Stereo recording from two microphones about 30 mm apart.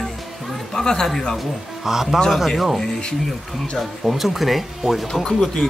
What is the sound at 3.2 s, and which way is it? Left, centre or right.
Speech, centre.